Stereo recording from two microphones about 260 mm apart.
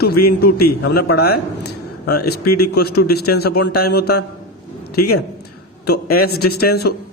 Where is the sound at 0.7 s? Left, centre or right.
Left.